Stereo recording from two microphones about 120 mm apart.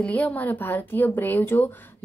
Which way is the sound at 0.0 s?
10° left (ahead or behind).